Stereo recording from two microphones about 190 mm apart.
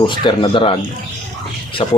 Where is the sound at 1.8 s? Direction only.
30° left (ahead or behind).